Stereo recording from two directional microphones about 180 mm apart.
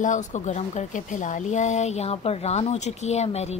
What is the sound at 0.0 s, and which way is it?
Speech, 45° left (ahead or behind).